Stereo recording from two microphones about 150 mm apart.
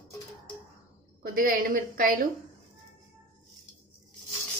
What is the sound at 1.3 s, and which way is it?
Speech, 70° right (ahead or behind).